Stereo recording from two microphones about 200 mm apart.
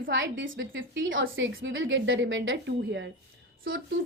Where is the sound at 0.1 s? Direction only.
65° right (ahead or behind).